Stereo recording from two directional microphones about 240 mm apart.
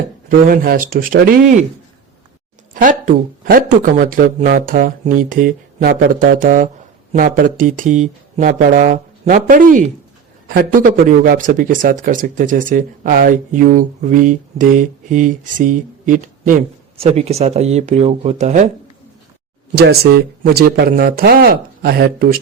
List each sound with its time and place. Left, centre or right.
0.3 s speech: right
2.7 s speech: right
19.7 s speech: right